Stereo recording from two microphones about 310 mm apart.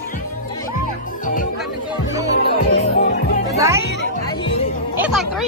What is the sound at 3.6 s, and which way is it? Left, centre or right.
Music, centre.